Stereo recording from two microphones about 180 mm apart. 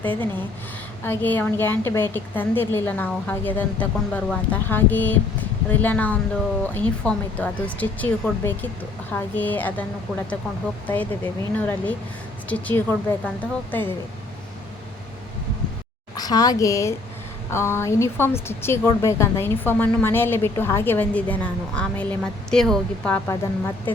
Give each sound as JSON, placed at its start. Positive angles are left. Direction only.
{"t": 0.0, "sound": "a woman's voice", "side_deg": 10}
{"t": 10.8, "sound": "a woman's voice", "side_deg": 10}
{"t": 16.1, "sound": "a woman's voice", "side_deg": 20}